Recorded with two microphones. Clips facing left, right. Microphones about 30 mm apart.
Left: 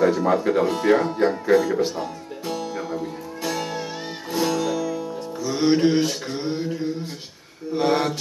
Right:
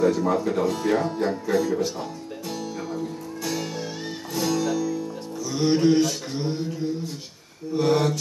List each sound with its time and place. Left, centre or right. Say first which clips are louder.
0.0 s speech: left 2 dB; left
2.0 s music: left 3 dB; centre
5.4 s music: left 2 dB; left
7.7 s mantra: even; left